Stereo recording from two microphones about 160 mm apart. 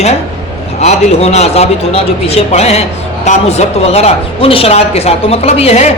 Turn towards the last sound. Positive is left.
turn(degrees=40)  # may be behind; listen again after turning